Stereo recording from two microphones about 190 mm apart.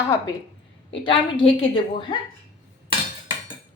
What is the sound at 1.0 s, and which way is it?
A woman's voice, 25° left (ahead or behind).